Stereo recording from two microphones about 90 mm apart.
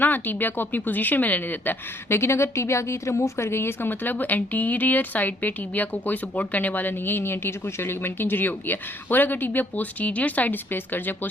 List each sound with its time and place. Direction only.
0.0 s a woman's voice: 20° left (ahead or behind)